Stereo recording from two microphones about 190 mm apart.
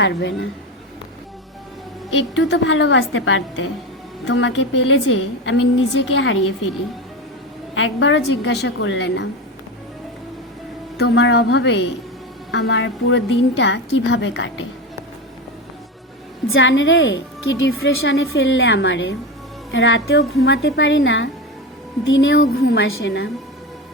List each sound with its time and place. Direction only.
0.0 s a woman's voice: 70° left (ahead or behind)
2.3 s a woman's voice: 75° left (ahead or behind); by 6.5 s 90° left
7.8 s a woman's voice: 85° left; by 9.2 s 65° left (ahead or behind)
10.9 s a woman's voice: 65° left (ahead or behind)
16.5 s a woman's voice: 75° left (ahead or behind)